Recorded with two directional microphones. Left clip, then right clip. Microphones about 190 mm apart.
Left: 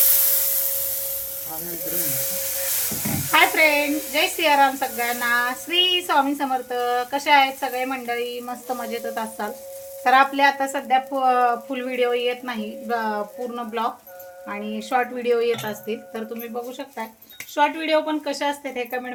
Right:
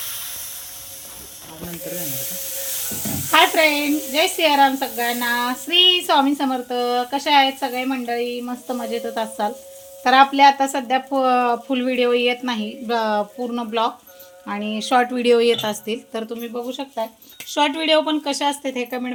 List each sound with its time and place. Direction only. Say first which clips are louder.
3.3 s speech: right 2 dB; 45° right (ahead or behind)